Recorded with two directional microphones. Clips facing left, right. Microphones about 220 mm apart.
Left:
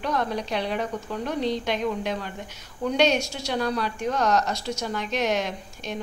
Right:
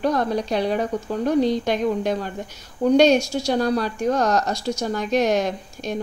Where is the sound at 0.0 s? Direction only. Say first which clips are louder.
Right 6 dB; 40° right (ahead or behind).